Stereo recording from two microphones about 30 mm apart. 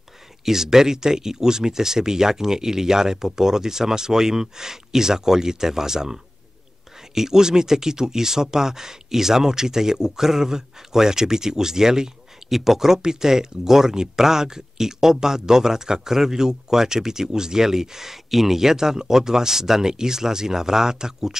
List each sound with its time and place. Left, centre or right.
0.5 s speech: centre
12.4 s speech: centre